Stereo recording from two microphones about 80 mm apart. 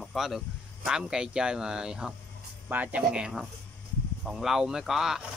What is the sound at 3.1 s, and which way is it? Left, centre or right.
Speech, centre.